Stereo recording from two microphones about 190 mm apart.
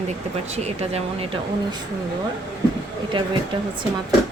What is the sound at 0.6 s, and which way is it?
Speech, 35° right (ahead or behind).